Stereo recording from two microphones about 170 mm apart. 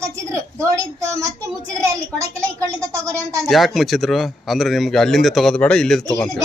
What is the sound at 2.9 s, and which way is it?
Speech, 20° right (ahead or behind).